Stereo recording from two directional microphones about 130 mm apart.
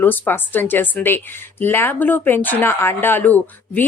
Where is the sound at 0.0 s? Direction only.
15° left (ahead or behind).